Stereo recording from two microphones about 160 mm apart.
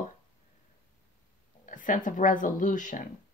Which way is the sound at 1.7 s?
55° left (ahead or behind).